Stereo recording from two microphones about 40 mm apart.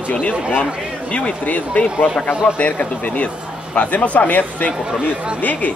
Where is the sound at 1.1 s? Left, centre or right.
Left.